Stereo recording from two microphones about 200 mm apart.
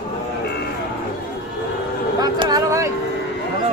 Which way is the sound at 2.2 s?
20° right (ahead or behind).